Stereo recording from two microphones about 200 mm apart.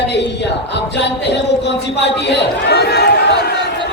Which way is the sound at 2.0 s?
60° left (ahead or behind).